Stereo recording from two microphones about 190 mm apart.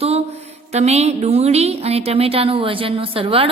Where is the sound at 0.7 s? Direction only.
35° right (ahead or behind).